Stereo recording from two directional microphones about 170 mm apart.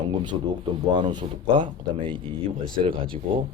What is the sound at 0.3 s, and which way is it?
Speech, 25° right (ahead or behind).